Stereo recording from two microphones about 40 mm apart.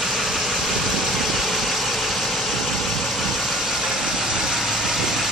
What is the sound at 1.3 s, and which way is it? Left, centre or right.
Vehicle, centre.